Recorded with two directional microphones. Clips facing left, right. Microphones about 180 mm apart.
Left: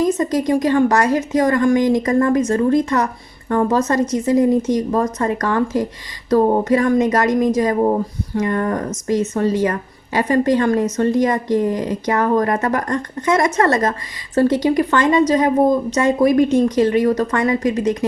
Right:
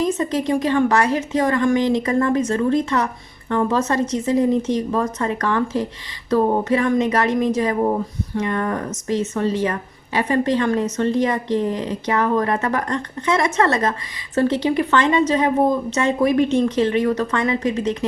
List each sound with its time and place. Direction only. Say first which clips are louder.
0.3 s a woman's voice: left 3 dB; 45° left (ahead or behind)